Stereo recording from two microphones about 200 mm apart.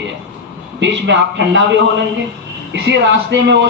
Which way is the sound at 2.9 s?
60° right (ahead or behind).